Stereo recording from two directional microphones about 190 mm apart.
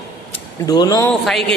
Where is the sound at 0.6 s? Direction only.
20° left (ahead or behind).